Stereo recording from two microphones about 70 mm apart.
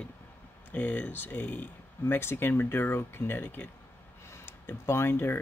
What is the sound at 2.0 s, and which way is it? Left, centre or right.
Speech, left.